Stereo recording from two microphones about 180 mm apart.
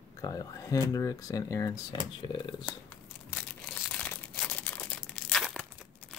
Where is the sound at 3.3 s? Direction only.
5° left (ahead or behind).